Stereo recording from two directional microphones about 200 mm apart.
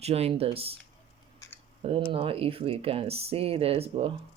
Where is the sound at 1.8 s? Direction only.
30° right (ahead or behind).